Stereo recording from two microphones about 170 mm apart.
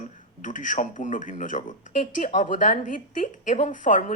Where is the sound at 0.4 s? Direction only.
50° left (ahead or behind).